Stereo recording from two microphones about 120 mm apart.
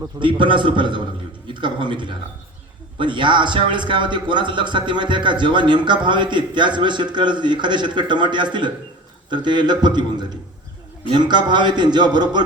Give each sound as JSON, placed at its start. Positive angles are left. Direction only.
{"t": 0.2, "sound": "a man's voice", "side_deg": -45}